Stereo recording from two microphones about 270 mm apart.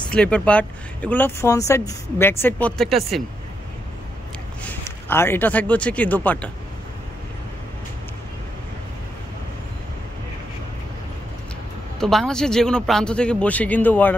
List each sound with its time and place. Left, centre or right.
0.1 s speech: centre
4.6 s speech: centre
12.0 s speech: centre